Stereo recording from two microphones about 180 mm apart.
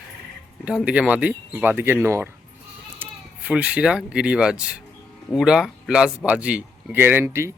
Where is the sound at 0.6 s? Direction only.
5° right (ahead or behind).